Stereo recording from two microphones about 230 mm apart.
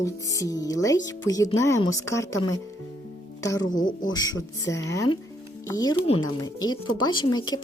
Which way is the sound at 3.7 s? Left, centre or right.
Left.